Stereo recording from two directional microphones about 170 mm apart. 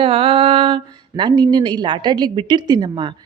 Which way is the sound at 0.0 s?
35° right (ahead or behind).